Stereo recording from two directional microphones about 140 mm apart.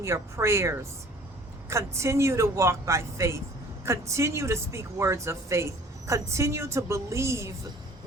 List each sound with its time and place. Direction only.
0.0 s speech: 20° right (ahead or behind)